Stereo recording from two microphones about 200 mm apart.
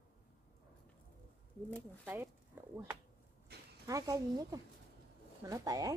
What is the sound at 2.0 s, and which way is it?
Speech, 10° right (ahead or behind).